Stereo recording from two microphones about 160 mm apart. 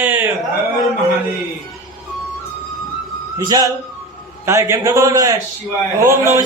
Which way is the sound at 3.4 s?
25° right (ahead or behind).